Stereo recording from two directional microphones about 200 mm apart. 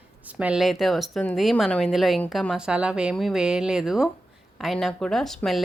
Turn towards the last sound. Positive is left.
turn(degrees=0)  # may be behind; listen again after turning